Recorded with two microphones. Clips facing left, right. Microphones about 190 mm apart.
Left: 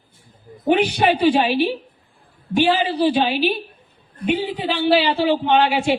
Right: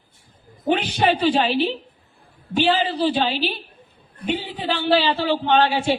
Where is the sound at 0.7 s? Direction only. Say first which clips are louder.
Left 3 dB; 10° left (ahead or behind).